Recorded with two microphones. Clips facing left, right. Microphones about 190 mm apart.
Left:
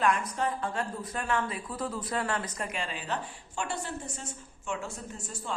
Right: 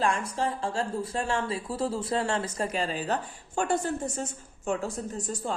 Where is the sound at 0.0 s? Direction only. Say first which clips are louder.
Right 1 dB; 30° right (ahead or behind).